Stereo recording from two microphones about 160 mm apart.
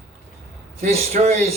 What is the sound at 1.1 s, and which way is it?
Speech, 45° right (ahead or behind).